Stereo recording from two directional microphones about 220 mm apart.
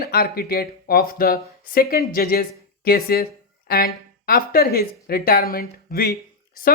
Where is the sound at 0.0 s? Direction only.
45° left (ahead or behind).